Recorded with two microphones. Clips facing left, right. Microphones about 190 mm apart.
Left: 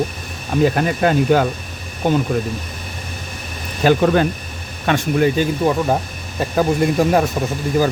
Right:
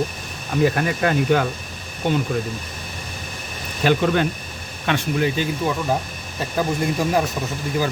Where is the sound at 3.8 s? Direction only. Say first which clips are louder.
Left 4 dB; 40° left (ahead or behind).